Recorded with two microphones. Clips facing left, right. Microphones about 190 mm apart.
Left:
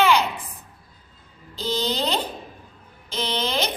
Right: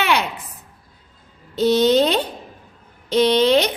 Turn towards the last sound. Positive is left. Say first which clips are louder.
# right 10 dB
turn(degrees=-70)  # may be behind; listen again after turning